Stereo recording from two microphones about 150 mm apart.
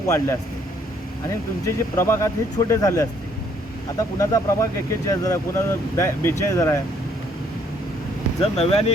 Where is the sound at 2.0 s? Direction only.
20° left (ahead or behind).